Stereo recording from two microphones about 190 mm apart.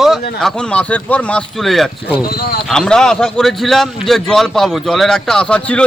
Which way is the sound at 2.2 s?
55° left (ahead or behind).